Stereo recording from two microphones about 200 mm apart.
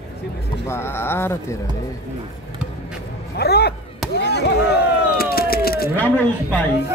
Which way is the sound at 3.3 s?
55° left (ahead or behind).